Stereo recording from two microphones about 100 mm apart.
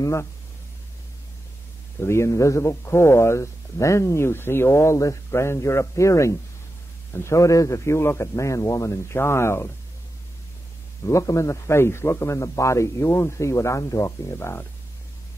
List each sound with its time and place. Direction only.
0.0 s speech: 30° left (ahead or behind)
2.0 s speech: 25° left (ahead or behind)
11.1 s speech: 30° left (ahead or behind)